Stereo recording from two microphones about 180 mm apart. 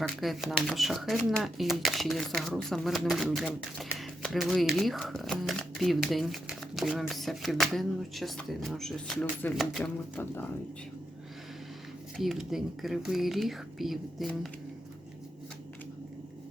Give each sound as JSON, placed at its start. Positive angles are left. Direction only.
{"t": 0.2, "sound": "speech", "side_deg": 0}
{"t": 12.1, "sound": "speech", "side_deg": 0}